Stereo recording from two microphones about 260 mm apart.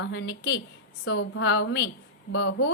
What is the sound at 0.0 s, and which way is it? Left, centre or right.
A woman's voice, left.